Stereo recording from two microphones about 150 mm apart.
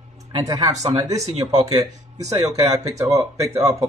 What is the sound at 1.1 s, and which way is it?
Speech, 45° right (ahead or behind).